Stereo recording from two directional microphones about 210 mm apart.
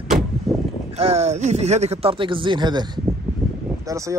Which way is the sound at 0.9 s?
30° right (ahead or behind).